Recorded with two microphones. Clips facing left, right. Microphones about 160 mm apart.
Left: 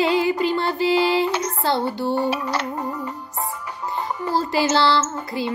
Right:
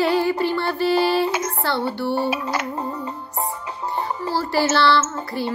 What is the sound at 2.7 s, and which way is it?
Music, 30° right (ahead or behind).